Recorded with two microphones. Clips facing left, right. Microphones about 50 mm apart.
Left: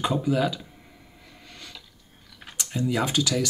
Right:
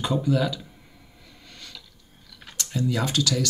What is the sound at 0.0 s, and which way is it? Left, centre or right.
Speech, centre.